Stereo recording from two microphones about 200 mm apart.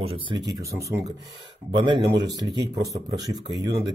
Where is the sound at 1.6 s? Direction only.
25° right (ahead or behind).